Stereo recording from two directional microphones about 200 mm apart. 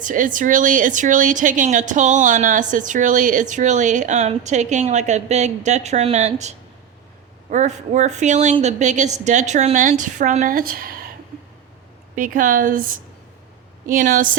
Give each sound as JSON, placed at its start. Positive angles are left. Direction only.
{"t": 0.0, "sound": "a woman's voice", "side_deg": -40}
{"t": 7.5, "sound": "a woman's voice", "side_deg": -35}
{"t": 12.1, "sound": "speech", "side_deg": -40}